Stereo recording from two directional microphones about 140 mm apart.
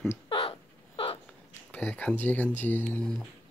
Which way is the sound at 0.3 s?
40° left (ahead or behind).